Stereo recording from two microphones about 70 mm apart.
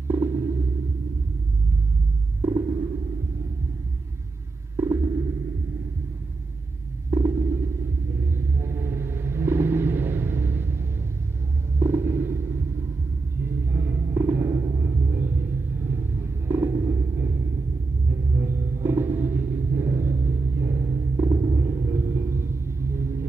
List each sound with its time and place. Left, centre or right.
0.1 s stomach rumble: right
4.7 s stomach rumble: right
7.1 s whale vocalization: right
11.8 s a sound: right
13.4 s rumble: right
14.1 s rumble: right